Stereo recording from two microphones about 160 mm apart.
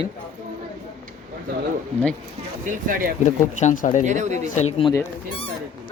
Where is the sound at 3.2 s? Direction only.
50° left (ahead or behind).